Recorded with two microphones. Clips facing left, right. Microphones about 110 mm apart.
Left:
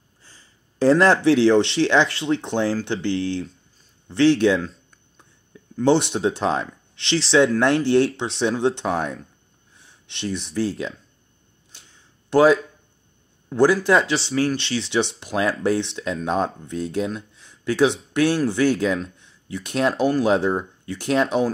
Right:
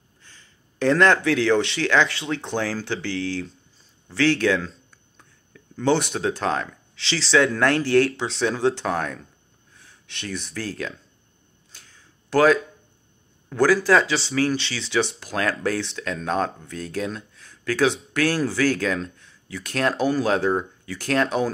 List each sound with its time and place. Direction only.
0.7 s speech: 30° left (ahead or behind)
11.7 s a sound: 25° left (ahead or behind)
13.5 s speech: 20° left (ahead or behind)
14.3 s speech: centre (ahead or behind)
14.7 s speech: 25° left (ahead or behind)
17.4 s a sound: 25° left (ahead or behind)
18.1 s speech: 25° left (ahead or behind)